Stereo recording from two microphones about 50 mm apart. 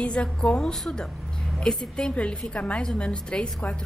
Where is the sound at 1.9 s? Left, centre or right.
Left.